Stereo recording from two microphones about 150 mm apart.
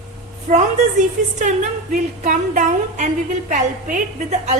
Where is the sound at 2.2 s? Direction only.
55° right (ahead or behind).